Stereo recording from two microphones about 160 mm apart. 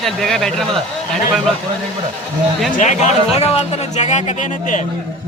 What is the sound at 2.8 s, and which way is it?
A man's voice, 50° left (ahead or behind).